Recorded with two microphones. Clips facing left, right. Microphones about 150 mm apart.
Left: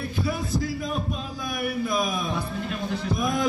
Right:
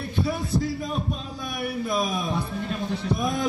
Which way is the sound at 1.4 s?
30° right (ahead or behind).